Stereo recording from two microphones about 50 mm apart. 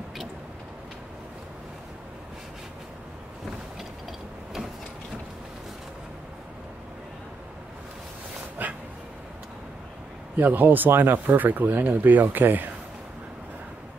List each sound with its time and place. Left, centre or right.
8.6 s dog: right
10.3 s speech: right